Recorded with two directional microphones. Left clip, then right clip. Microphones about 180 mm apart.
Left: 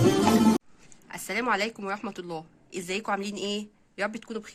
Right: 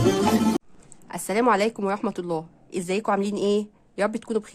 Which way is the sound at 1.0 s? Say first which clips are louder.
Right 7 dB; 50° right (ahead or behind).